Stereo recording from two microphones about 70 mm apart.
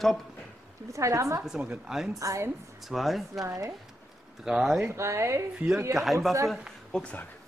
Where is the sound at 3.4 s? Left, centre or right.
Right.